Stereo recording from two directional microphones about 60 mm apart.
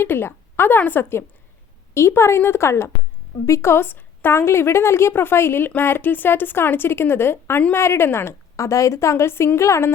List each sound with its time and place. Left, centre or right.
0.0 s a woman's voice: left
1.9 s a woman's voice: left
8.5 s a woman's voice: left